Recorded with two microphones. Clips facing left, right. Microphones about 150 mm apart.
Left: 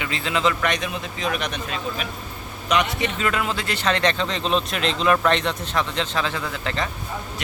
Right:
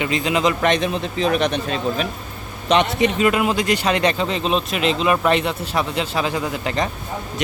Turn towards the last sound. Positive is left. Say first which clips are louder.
# right 5 dB
turn(degrees=-15)  # may be behind; listen again after turning